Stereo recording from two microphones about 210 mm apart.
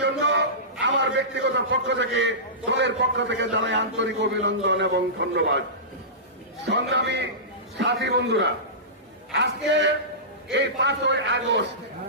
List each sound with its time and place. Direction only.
0.0 s a man's voice: 60° right (ahead or behind)
6.6 s a man's voice: 55° right (ahead or behind)
10.5 s a man's voice: 55° right (ahead or behind)